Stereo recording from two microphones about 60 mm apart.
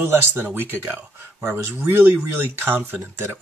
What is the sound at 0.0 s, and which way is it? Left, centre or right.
Speech, right.